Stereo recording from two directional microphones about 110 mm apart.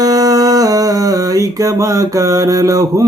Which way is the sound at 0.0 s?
35° right (ahead or behind).